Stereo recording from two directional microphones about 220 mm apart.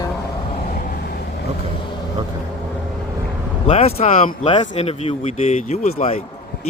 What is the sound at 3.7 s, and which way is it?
Speech, 25° left (ahead or behind).